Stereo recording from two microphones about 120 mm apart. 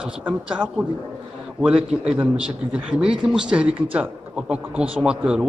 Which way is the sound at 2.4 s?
10° right (ahead or behind).